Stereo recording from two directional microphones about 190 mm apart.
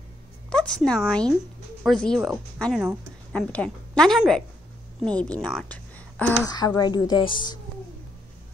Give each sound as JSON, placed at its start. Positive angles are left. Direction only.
{"t": 0.5, "sound": "a woman's voice", "side_deg": 5}
{"t": 6.4, "sound": "a woman's voice", "side_deg": 20}